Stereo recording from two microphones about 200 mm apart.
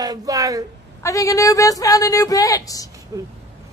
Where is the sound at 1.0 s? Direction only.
15° left (ahead or behind).